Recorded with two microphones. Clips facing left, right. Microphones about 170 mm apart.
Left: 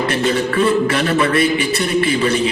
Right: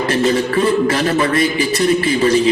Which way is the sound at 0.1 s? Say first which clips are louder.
Right 2 dB; 30° right (ahead or behind).